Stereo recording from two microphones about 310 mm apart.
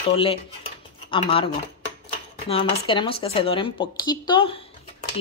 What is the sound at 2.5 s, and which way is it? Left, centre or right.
Speech, centre.